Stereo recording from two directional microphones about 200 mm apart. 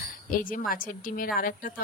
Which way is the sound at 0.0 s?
45° left (ahead or behind).